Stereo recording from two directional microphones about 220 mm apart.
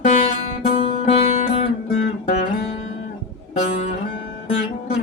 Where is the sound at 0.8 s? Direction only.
30° left (ahead or behind).